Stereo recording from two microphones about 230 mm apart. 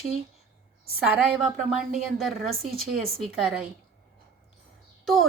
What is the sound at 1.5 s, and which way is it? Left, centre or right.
Speech, right.